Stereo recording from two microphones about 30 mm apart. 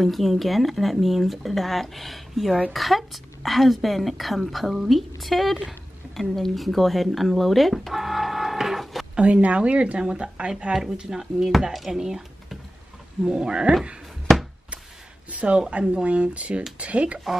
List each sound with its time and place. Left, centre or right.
0.0 s speech: centre
7.8 s livestock: centre
9.1 s speech: right
9.9 s speech: right
11.1 s speech: centre
13.3 s speech: right
15.3 s speech: right